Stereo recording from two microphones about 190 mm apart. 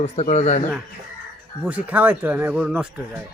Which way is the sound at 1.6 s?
5° right (ahead or behind).